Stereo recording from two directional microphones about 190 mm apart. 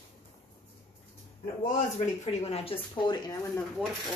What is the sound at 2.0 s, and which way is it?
Speech, 35° left (ahead or behind).